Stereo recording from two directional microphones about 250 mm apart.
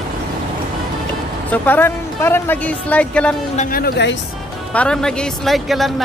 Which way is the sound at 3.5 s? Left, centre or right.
Left.